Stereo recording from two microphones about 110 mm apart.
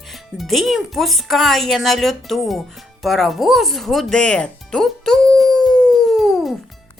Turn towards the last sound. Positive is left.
turn(degrees=0)  # may be behind; listen again after turning